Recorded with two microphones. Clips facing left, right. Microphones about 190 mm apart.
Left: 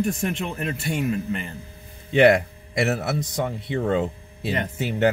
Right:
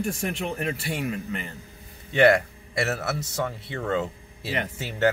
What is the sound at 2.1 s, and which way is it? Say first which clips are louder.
A man's voice: left 3 dB; 20° left (ahead or behind).